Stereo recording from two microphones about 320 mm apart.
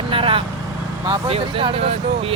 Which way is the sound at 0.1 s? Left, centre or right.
Centre.